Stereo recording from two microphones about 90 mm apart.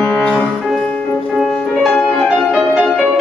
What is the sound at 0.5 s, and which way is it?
Music, centre (ahead or behind).